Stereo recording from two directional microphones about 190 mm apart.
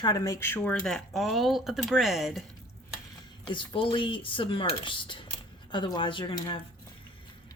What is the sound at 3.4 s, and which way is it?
Speech, 25° left (ahead or behind).